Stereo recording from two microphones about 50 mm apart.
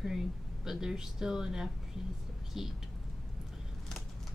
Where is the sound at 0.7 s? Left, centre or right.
Centre.